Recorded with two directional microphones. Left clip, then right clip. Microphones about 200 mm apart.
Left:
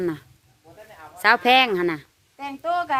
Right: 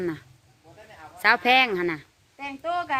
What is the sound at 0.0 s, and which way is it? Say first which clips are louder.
Speech: left 3 dB; 20° left (ahead or behind).